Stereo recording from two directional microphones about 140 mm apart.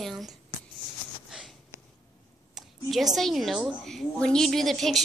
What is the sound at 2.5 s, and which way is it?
A woman's voice, centre (ahead or behind).